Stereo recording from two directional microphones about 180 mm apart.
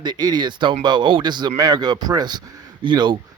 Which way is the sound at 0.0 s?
25° right (ahead or behind).